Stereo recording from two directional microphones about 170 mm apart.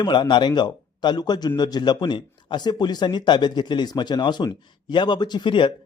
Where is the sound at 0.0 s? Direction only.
25° left (ahead or behind).